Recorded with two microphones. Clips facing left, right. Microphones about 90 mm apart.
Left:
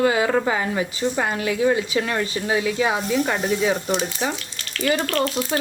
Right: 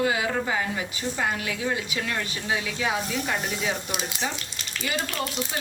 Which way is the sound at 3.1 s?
60° left (ahead or behind).